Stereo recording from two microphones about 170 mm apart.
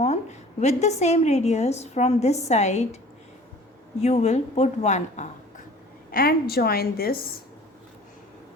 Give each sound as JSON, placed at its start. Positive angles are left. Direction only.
{"t": 0.0, "sound": "a woman's voice", "side_deg": 40}
{"t": 4.0, "sound": "a woman's voice", "side_deg": 40}
{"t": 6.1, "sound": "a woman's voice", "side_deg": 60}